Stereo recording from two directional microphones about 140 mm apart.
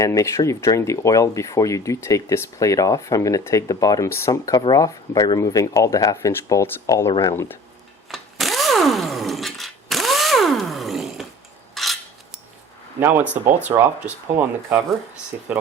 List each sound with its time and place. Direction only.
0.0 s speech: 20° left (ahead or behind)
8.1 s a sound: centre (ahead or behind)
11.7 s filing: centre (ahead or behind)
13.0 s speech: 15° right (ahead or behind)
13.3 s speech: 60° right (ahead or behind)
13.7 s speech: 15° right (ahead or behind)